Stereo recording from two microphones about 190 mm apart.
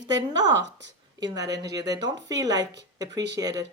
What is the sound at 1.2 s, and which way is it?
Speech, 20° right (ahead or behind).